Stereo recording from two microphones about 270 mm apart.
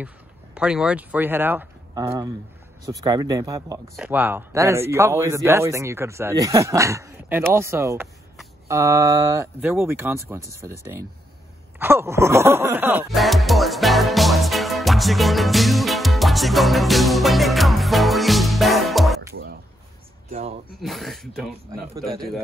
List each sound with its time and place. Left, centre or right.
0.6 s speech: centre
11.8 s music: centre
20.2 s speech: right
20.8 s speech: centre